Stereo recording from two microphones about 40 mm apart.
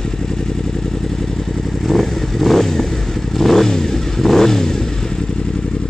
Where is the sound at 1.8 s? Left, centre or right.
Centre.